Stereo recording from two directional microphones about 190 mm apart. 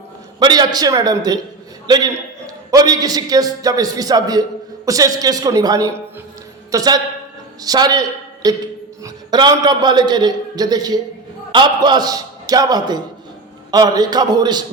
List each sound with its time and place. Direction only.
0.3 s a man's voice: 20° right (ahead or behind)
2.6 s a man's voice: 20° right (ahead or behind)